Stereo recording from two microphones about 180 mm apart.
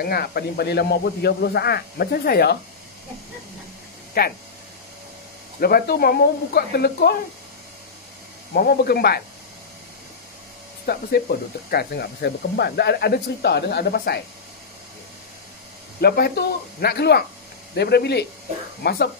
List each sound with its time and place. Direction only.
0.0 s speech: 60° left (ahead or behind)
4.2 s speech: 60° left (ahead or behind)
5.6 s speech: 55° left (ahead or behind)
8.5 s speech: 55° left (ahead or behind)
10.9 s speech: 60° left (ahead or behind)
16.0 s speech: 60° left (ahead or behind)